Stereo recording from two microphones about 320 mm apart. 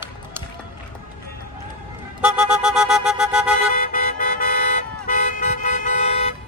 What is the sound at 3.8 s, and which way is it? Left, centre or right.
Vehicle, left.